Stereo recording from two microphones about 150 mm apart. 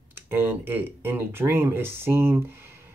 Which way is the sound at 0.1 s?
15° right (ahead or behind).